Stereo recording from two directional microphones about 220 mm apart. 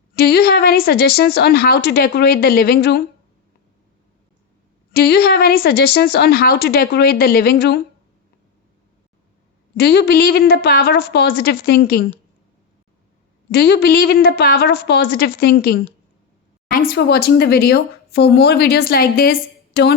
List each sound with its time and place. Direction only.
0.1 s speech: 45° left (ahead or behind)
4.9 s speech: 45° left (ahead or behind)
9.7 s speech: 50° left (ahead or behind)
13.5 s speech: 50° left (ahead or behind)